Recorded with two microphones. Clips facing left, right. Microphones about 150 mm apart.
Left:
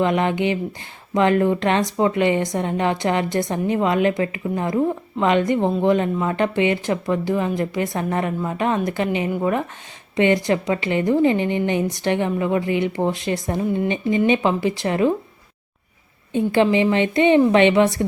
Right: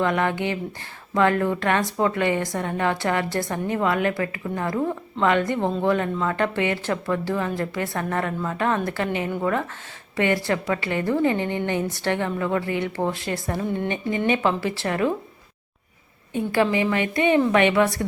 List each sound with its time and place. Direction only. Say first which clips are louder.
0.0 s a woman's voice: left 3 dB; 20° left (ahead or behind)
16.3 s a woman's voice: left 4 dB; 20° left (ahead or behind)